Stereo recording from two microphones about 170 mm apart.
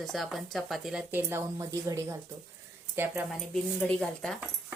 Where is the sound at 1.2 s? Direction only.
15° right (ahead or behind).